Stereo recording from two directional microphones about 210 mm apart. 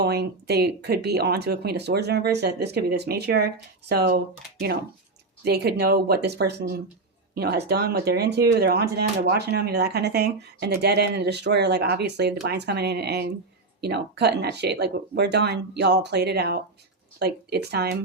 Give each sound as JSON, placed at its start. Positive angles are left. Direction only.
{"t": 0.0, "sound": "speech", "side_deg": -50}
{"t": 5.4, "sound": "speech", "side_deg": -50}